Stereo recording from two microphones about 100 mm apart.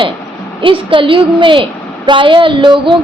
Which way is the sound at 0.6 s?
60° right (ahead or behind).